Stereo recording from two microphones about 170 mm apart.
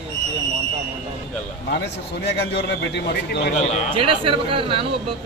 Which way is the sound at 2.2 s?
80° left.